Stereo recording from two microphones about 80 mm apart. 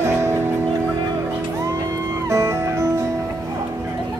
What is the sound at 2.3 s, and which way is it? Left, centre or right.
Music, right.